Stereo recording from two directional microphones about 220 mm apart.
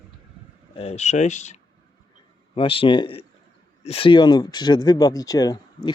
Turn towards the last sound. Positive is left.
turn(degrees=15)  # may be behind; listen again after turning